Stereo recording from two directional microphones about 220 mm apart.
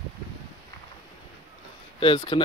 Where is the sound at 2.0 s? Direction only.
25° left (ahead or behind).